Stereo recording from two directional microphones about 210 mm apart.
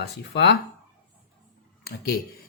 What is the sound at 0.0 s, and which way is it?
Speech, 50° left (ahead or behind).